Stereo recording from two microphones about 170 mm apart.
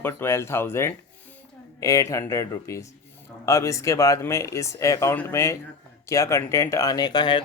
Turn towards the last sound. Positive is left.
turn(degrees=25)  # may be behind; listen again after turning